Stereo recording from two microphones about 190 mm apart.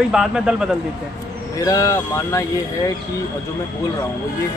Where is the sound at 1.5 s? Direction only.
20° left (ahead or behind).